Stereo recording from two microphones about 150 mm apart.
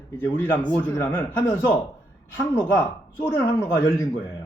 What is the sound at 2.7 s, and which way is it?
Speech, 15° left (ahead or behind).